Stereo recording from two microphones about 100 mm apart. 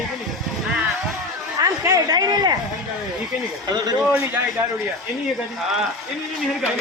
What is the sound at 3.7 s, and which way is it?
Speech, 40° right (ahead or behind).